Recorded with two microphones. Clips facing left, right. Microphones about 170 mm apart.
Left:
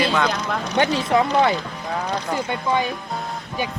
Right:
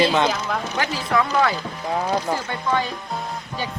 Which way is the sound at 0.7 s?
25° left (ahead or behind).